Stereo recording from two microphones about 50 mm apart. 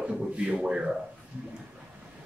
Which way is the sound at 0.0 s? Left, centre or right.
Right.